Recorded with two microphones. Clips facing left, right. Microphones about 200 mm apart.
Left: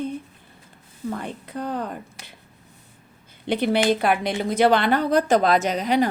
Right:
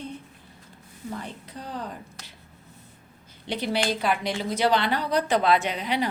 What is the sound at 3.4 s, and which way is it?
A woman's voice, 55° left (ahead or behind).